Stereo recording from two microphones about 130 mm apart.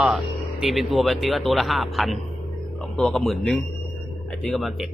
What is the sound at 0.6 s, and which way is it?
Speech, centre (ahead or behind).